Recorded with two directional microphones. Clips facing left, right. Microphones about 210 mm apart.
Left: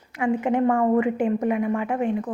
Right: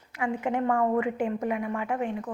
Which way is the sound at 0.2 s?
20° left (ahead or behind).